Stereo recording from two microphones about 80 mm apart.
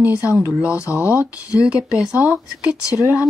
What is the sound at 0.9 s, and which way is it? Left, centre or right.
Speech, left.